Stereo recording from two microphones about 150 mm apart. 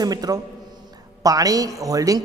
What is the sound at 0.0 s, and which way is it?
A man's voice, 25° right (ahead or behind).